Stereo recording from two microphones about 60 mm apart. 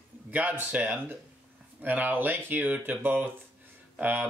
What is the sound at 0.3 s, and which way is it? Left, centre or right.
Speech, right.